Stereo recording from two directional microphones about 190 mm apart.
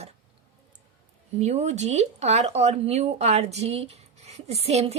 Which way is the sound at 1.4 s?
35° right (ahead or behind).